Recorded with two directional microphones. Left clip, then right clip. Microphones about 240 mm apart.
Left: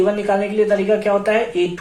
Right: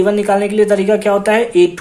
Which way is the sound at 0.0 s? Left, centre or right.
Right.